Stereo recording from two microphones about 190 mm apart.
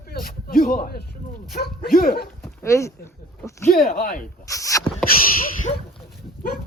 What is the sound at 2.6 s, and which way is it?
Speech, 15° left (ahead or behind).